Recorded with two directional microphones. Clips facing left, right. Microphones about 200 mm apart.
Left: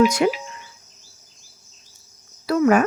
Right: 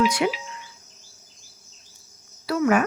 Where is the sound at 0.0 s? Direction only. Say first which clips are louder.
Left 5 dB; 45° left (ahead or behind).